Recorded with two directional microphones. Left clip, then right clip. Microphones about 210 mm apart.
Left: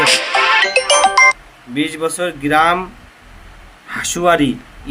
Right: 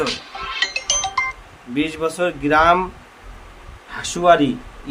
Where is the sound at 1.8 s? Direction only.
15° right (ahead or behind).